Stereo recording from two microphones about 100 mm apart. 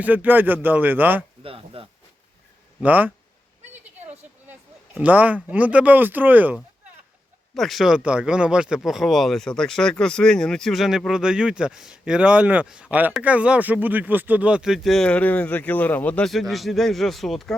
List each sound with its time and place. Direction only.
0.0 s speech: 15° right (ahead or behind)
1.4 s speech: 65° right (ahead or behind)
2.8 s speech: 15° right (ahead or behind)
4.9 s speech: 15° right (ahead or behind)
7.5 s speech: centre (ahead or behind)
16.3 s speech: centre (ahead or behind)